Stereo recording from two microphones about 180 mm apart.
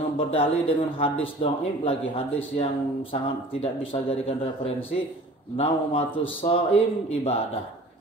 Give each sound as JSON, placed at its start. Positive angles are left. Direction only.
{"t": 0.3, "sound": "a man's voice", "side_deg": 30}